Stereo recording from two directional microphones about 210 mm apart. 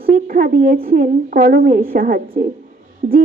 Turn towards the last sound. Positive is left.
turn(degrees=-30)  # may be behind; listen again after turning